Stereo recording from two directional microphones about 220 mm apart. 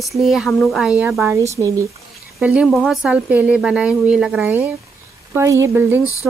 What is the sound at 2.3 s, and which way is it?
Speech, centre (ahead or behind).